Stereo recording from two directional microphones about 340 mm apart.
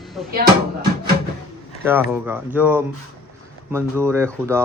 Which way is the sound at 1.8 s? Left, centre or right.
Centre.